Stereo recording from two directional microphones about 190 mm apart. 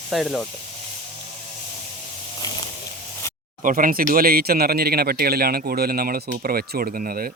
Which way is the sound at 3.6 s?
45° right (ahead or behind).